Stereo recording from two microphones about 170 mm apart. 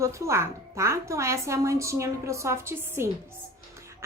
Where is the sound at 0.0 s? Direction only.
15° right (ahead or behind).